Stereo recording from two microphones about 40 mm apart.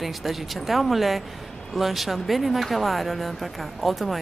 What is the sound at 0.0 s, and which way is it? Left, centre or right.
Speech, centre.